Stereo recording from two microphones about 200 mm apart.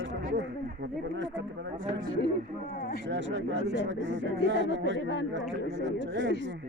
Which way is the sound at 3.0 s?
60° right (ahead or behind).